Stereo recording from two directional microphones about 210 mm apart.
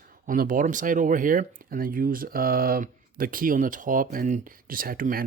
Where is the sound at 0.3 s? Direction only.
40° right (ahead or behind).